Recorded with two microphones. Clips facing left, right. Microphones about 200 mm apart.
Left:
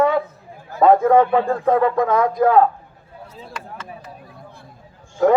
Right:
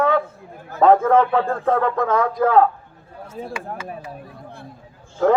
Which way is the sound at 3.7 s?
50° right (ahead or behind).